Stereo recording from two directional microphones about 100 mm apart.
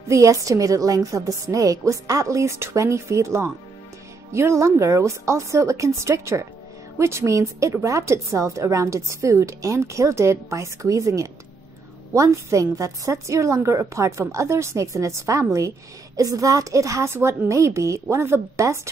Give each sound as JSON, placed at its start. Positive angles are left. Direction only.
{"t": 0.1, "sound": "a woman's voice", "side_deg": -30}